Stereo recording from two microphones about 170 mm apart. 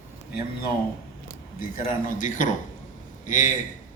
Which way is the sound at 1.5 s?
50° left (ahead or behind).